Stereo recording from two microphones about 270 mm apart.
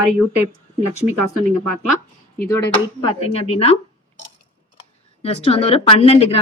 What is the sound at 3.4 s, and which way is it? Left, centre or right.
Speech, left.